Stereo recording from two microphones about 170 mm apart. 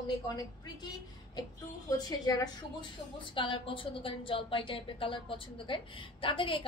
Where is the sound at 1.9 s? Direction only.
20° left (ahead or behind).